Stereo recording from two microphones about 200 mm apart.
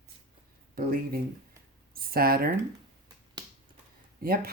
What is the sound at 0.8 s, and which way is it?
Speech, 45° right (ahead or behind).